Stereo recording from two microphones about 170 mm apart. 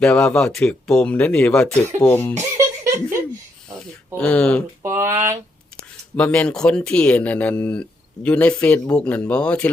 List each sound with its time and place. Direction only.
0.0 s speech: 5° left (ahead or behind)
2.3 s music: 15° right (ahead or behind)
4.2 s speech: 5° left (ahead or behind)
4.8 s a sound: 15° right (ahead or behind)
6.1 s speech: 10° left (ahead or behind)